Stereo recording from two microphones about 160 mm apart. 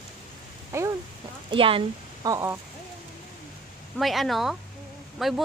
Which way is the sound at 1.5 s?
35° right (ahead or behind).